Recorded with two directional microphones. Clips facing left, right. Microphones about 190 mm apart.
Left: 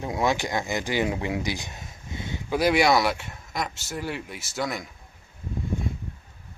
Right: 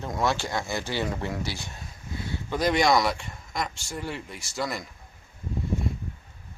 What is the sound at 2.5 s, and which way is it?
Speech, 10° left (ahead or behind).